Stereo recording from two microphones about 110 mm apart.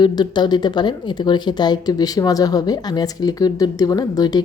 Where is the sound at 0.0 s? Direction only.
40° left (ahead or behind).